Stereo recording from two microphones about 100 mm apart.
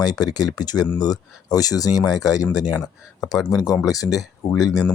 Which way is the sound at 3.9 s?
35° left (ahead or behind).